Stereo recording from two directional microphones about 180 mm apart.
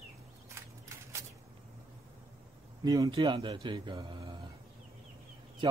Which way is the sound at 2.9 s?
20° right (ahead or behind).